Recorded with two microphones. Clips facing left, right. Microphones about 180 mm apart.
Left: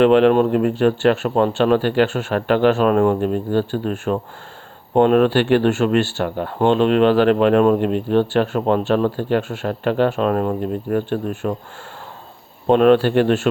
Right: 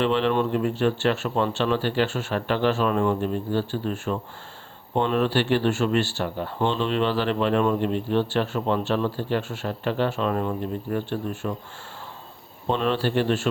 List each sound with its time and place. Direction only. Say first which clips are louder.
0.0 s a man's voice: left 9 dB; 55° left (ahead or behind)
12.6 s speech: left 11 dB; 60° left (ahead or behind)